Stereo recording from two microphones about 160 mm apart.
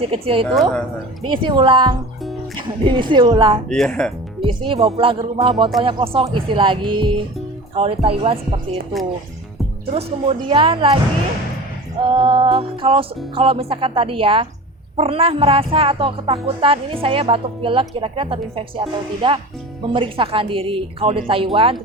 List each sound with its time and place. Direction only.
0.0 s speech: 35° right (ahead or behind)
0.5 s speech: 5° left (ahead or behind)
1.3 s a woman's voice: 30° right (ahead or behind)
3.7 s speech: 5° left (ahead or behind)
4.4 s speech: 30° right (ahead or behind)
9.9 s speech: 35° right (ahead or behind)
12.0 s speech: 30° right (ahead or behind)